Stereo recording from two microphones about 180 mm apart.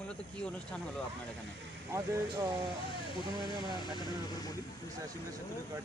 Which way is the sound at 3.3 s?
25° right (ahead or behind).